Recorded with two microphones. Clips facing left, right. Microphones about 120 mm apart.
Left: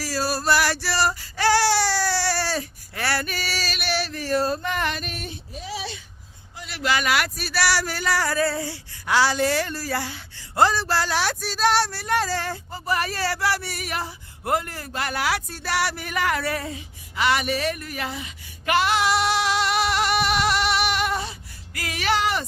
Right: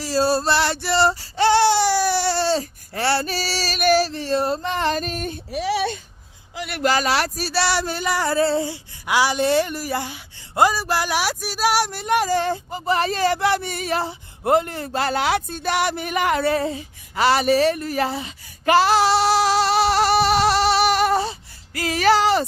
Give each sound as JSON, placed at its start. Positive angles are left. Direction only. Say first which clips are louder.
{"t": 0.0, "sound": "child singing", "louder": "right 6 dB", "side_deg": -25}
{"t": 4.1, "sound": "female singing", "louder": "right 2 dB", "side_deg": -25}
{"t": 4.9, "sound": "child singing", "louder": "right 7 dB", "side_deg": -40}
{"t": 5.5, "sound": "a child's voice", "louder": "right 12 dB", "side_deg": -75}
{"t": 6.6, "sound": "a sound", "louder": "right 8 dB", "side_deg": -60}
{"t": 6.8, "sound": "female singing", "louder": "right 3 dB", "side_deg": -35}